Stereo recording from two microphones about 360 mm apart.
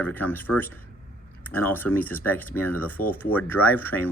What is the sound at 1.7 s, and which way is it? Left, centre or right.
Speech, centre.